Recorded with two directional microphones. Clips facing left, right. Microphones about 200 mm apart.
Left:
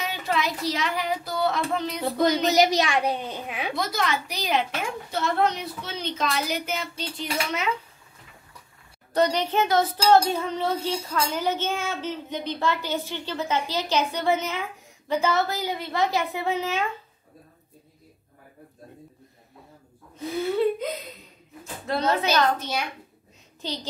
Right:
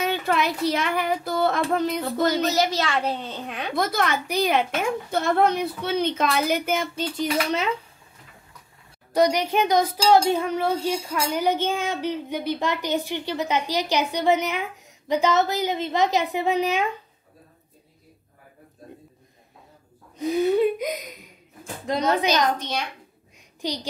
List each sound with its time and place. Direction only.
0.0 s speech: 55° right (ahead or behind)
2.0 s a woman's voice: 15° left (ahead or behind)
3.7 s a woman's voice: 55° right (ahead or behind)
9.1 s speech: 10° right (ahead or behind)
20.2 s speech: 15° right (ahead or behind)
22.6 s a woman's voice: 5° left (ahead or behind)
23.6 s speech: 15° right (ahead or behind)